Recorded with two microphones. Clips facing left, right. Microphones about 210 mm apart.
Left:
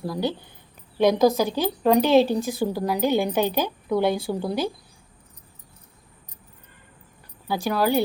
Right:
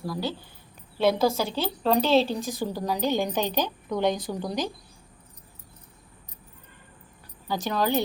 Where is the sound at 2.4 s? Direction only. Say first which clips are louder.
Left 5 dB; 15° right (ahead or behind).